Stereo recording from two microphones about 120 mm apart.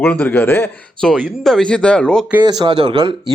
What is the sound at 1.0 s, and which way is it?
A man's voice, 5° left (ahead or behind).